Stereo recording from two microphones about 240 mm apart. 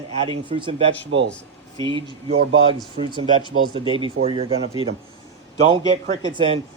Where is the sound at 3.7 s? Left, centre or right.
Right.